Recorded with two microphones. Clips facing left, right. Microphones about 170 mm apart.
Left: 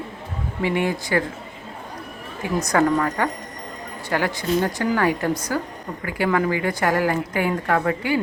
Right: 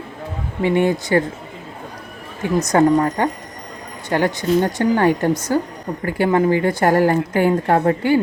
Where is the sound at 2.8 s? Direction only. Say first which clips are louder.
Right 5 dB; 35° right (ahead or behind).